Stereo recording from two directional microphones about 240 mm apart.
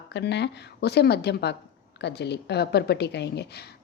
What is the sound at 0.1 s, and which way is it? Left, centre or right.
Speech, left.